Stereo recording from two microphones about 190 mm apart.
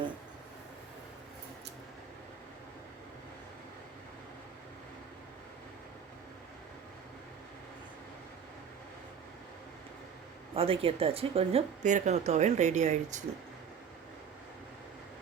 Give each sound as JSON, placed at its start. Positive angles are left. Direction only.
{"t": 10.5, "sound": "a woman's voice", "side_deg": -30}